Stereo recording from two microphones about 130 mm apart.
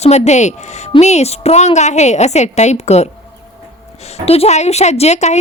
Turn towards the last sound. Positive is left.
turn(degrees=60)  # may be behind; listen again after turning